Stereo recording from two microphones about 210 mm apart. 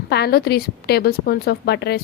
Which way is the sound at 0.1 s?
50° left (ahead or behind).